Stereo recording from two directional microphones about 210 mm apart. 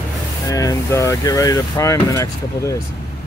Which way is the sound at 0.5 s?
15° left (ahead or behind).